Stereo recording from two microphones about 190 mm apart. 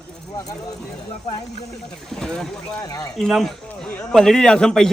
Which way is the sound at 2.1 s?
Centre (ahead or behind).